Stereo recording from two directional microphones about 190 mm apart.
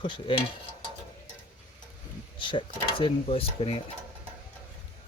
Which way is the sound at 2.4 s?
25° left (ahead or behind).